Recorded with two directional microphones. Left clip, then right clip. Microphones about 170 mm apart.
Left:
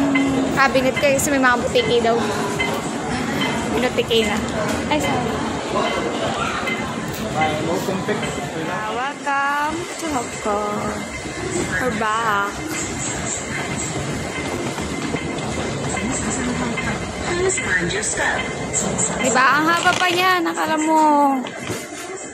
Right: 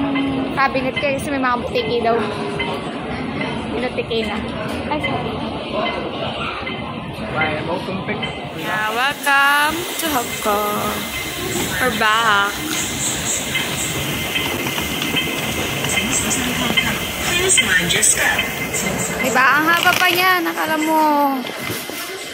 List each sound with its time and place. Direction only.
0.6 s a woman's voice: 20° left (ahead or behind)
8.9 s speech: centre (ahead or behind)
12.0 s speech: centre (ahead or behind)
19.2 s speech: 15° left (ahead or behind)